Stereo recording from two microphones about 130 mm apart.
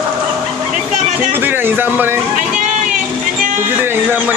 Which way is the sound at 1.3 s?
15° right (ahead or behind).